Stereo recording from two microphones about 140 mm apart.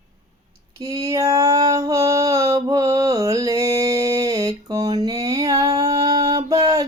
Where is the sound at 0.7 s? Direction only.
25° right (ahead or behind).